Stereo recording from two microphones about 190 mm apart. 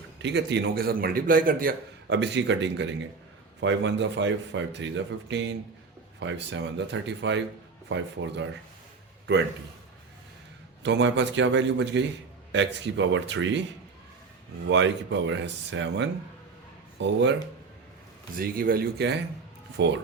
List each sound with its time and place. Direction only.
0.2 s a man's voice: 65° right (ahead or behind); by 1.7 s 50° right (ahead or behind)
2.0 s speech: 65° right (ahead or behind)
10.8 s speech: 70° right (ahead or behind)
14.7 s speech: 75° right (ahead or behind)
18.3 s a man's voice: 50° right (ahead or behind)
19.8 s speech: 65° right (ahead or behind)